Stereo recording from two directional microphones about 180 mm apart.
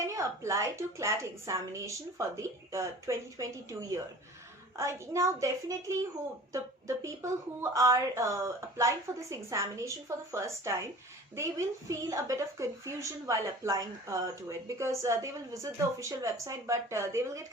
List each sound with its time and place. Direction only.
0.0 s speech: 15° right (ahead or behind)